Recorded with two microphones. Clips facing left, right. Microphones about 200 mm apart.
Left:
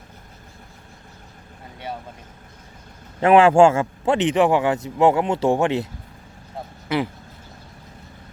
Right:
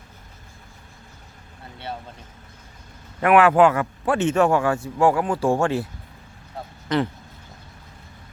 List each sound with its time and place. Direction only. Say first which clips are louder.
3.2 s a man's voice: left 3 dB; 25° left (ahead or behind)
6.8 s speech: right 1 dB; 10° left (ahead or behind)